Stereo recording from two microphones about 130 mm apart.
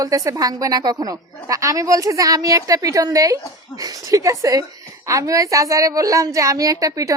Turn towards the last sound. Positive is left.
turn(degrees=-25)  # may be behind; listen again after turning